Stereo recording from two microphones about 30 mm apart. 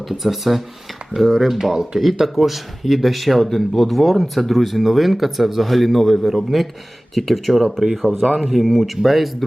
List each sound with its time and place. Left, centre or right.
0.1 s speech: centre
1.2 s speech: centre
1.5 s speech: centre
8.1 s speech: left
8.4 s speech: centre